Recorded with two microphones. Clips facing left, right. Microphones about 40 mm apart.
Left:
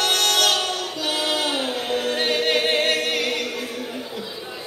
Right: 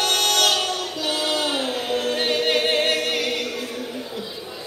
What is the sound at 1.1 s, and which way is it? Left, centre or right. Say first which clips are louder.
Choir: even; centre.